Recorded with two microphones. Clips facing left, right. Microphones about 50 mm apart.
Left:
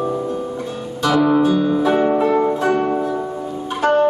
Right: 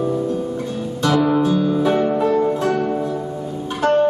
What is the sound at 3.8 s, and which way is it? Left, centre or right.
Music, centre.